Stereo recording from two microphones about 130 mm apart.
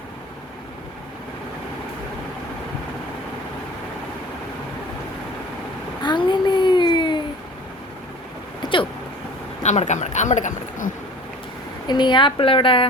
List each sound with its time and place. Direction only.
6.0 s a sound: 35° left (ahead or behind)
8.6 s vehicle: 40° left (ahead or behind)
9.6 s speech: 65° left (ahead or behind); by 10.9 s 80° left
11.9 s a woman's voice: 35° left (ahead or behind)